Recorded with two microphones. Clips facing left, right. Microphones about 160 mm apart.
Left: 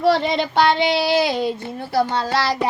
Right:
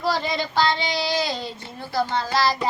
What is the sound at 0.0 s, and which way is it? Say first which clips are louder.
Child singing: left 7 dB; 65° left (ahead or behind).